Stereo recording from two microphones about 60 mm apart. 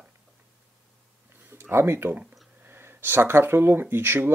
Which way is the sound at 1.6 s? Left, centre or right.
Right.